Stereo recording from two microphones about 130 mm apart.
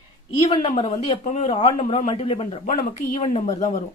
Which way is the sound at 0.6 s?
50° left (ahead or behind).